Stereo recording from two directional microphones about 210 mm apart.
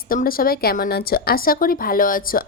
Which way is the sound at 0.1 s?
45° left (ahead or behind).